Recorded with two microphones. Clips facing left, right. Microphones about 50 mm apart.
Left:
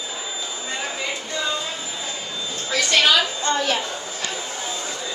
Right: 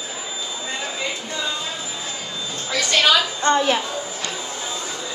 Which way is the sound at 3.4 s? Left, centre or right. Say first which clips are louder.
Right 4 dB; right.